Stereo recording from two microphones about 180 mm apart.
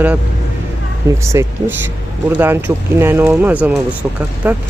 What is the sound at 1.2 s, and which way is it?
Speech, 15° right (ahead or behind).